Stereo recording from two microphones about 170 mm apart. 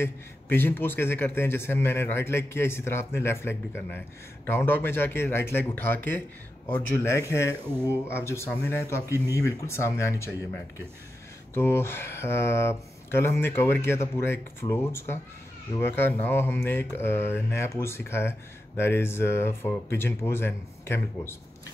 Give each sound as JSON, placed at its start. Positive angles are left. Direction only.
{"t": 0.0, "sound": "a man's voice", "side_deg": 10}
{"t": 11.5, "sound": "a man's voice", "side_deg": 15}